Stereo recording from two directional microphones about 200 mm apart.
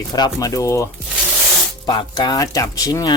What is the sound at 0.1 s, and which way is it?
Speech, 20° left (ahead or behind).